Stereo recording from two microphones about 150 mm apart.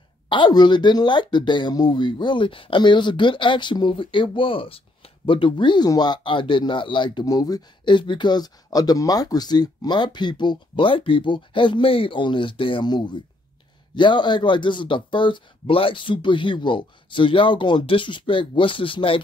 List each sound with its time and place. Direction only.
0.3 s speech: 30° left (ahead or behind)